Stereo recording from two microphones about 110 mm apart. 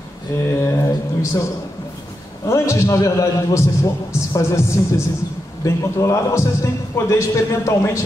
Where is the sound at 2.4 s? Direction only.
30° left (ahead or behind).